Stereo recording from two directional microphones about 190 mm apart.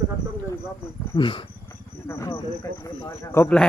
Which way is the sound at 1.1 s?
25° left (ahead or behind).